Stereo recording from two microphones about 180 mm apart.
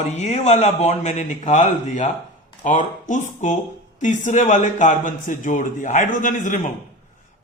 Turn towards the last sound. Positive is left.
turn(degrees=45)  # may be behind; listen again after turning